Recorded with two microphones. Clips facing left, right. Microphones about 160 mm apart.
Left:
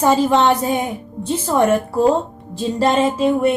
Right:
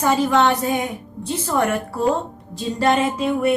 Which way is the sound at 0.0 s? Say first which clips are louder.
Left 3 dB; 20° left (ahead or behind).